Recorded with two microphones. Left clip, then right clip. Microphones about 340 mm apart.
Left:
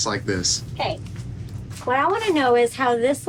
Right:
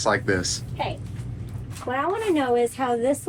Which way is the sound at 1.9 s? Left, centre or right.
Centre.